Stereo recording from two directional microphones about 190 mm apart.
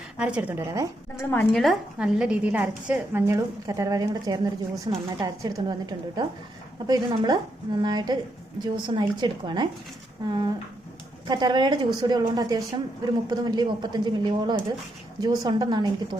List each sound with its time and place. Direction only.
0.2 s a woman's voice: 5° right (ahead or behind)
1.2 s a woman's voice: 10° left (ahead or behind); by 16.1 s 20° right (ahead or behind)